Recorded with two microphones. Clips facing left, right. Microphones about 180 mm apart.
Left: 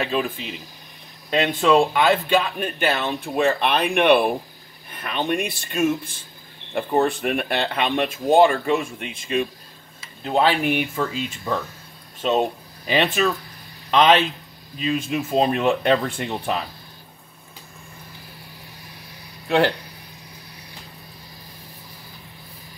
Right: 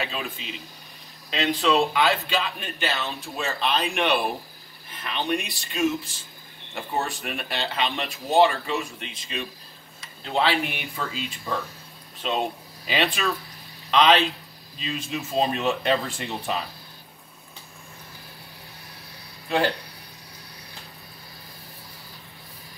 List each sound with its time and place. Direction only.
0.0 s speech: 50° left (ahead or behind)